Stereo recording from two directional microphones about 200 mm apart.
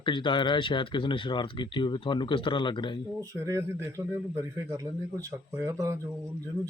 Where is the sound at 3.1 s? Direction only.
15° right (ahead or behind).